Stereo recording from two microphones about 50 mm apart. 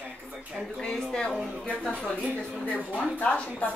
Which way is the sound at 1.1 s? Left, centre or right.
Centre.